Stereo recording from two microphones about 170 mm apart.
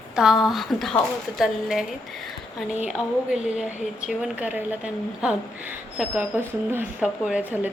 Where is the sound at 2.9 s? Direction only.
5° right (ahead or behind).